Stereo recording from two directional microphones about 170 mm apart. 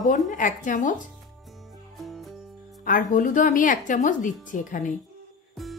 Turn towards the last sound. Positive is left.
turn(degrees=0)  # may be behind; listen again after turning